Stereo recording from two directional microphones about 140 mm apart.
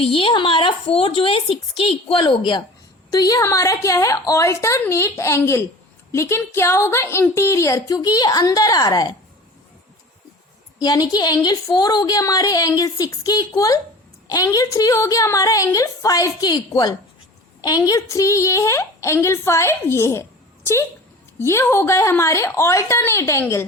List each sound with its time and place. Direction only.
0.0 s a woman's voice: 40° left (ahead or behind)
10.8 s a woman's voice: 30° left (ahead or behind)
21.3 s a woman's voice: 20° left (ahead or behind)